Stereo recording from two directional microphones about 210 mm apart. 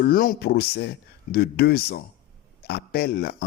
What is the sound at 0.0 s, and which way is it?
Speech, 45° left (ahead or behind).